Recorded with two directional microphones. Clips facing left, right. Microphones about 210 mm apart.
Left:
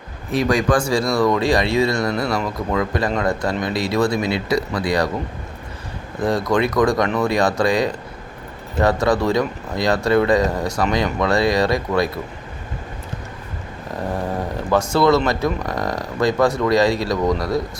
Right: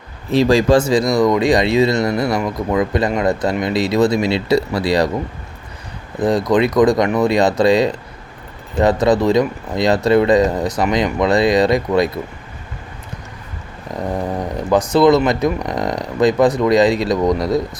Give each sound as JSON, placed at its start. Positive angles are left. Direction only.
{"t": 0.3, "sound": "speech", "side_deg": -25}
{"t": 6.1, "sound": "speech", "side_deg": -20}
{"t": 14.3, "sound": "a sound", "side_deg": -15}
{"t": 15.3, "sound": "speech", "side_deg": -20}